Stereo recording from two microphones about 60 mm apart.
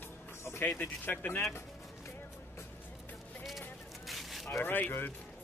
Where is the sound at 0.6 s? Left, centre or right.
Left.